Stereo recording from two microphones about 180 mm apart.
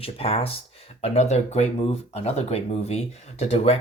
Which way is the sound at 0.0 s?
30° left (ahead or behind).